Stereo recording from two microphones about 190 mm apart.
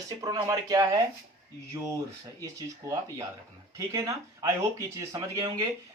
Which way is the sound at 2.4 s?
20° right (ahead or behind).